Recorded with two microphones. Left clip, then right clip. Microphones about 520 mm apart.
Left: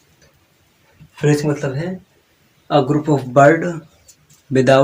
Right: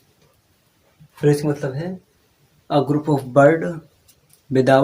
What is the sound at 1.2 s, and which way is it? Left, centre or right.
Speech, right.